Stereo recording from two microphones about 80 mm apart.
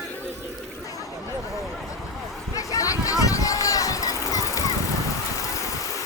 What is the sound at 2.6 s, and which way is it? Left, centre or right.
Run, left.